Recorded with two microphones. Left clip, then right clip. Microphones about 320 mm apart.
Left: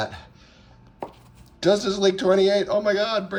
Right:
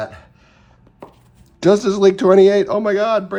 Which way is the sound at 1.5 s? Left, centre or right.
Centre.